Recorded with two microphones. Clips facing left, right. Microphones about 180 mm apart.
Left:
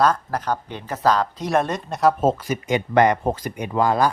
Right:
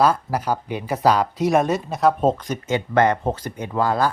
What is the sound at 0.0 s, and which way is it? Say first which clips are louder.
Speech: right 1 dB; 10° right (ahead or behind).